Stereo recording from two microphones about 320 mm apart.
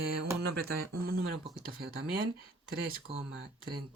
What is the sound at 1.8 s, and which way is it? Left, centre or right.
Speech, right.